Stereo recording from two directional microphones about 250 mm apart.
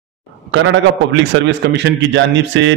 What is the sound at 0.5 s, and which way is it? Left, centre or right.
A man's voice, right.